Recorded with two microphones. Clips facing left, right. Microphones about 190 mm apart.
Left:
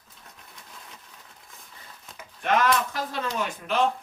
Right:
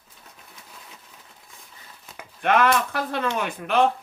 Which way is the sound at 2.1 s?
60° right (ahead or behind).